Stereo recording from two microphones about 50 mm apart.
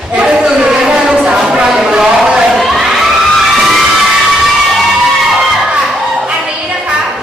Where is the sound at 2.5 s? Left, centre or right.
Centre.